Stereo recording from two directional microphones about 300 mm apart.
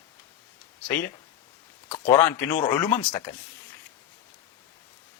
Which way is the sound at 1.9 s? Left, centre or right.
Centre.